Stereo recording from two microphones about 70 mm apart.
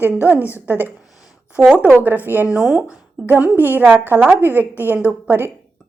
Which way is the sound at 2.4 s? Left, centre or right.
Centre.